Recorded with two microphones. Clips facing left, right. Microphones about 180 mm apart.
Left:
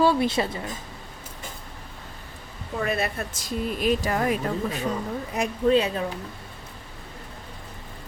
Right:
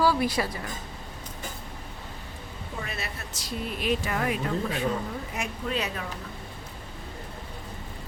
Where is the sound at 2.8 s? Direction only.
55° left (ahead or behind); by 5.9 s 30° left (ahead or behind).